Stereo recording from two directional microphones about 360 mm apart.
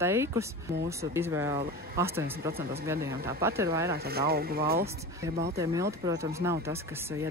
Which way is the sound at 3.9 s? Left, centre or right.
Right.